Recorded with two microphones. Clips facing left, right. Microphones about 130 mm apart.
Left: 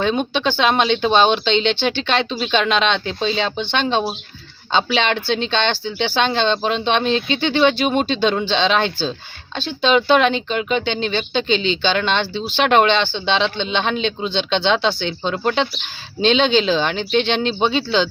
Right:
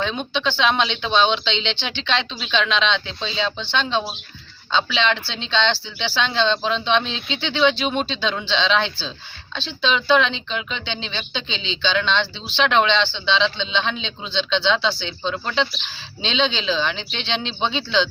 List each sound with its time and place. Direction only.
0.0 s speech: 50° left (ahead or behind)